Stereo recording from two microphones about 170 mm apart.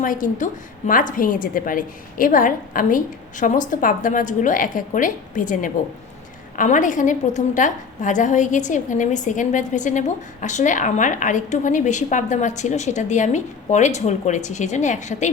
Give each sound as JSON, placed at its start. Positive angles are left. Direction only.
{"t": 0.0, "sound": "a woman's voice", "side_deg": 50}